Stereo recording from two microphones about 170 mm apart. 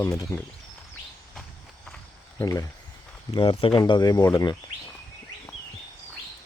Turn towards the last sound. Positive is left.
turn(degrees=25)  # may be behind; listen again after turning